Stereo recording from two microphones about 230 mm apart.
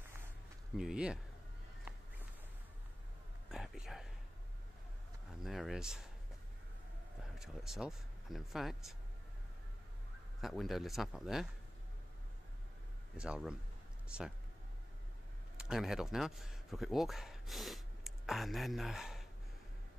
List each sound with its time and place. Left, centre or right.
0.7 s speech: centre
3.4 s a sound: centre
5.4 s speech: centre
7.3 s speech: centre
10.4 s speech: centre
13.2 s speech: centre
15.5 s speech: centre